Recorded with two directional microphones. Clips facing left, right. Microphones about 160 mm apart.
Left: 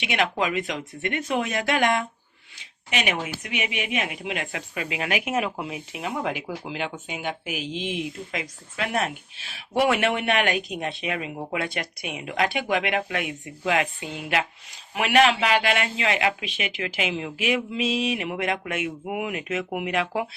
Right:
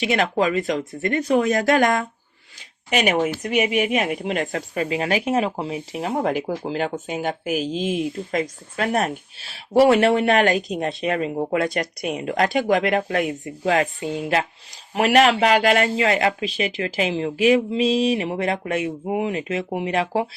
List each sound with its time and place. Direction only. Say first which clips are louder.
0.0 s speech: right 5 dB; 40° right (ahead or behind)